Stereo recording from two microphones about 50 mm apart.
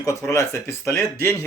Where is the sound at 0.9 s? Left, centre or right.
Left.